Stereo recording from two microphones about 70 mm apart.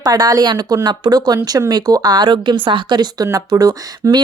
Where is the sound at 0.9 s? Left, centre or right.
Right.